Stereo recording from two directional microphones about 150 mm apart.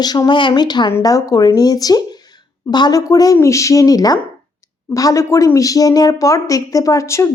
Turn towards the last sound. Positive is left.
turn(degrees=20)  # may be behind; listen again after turning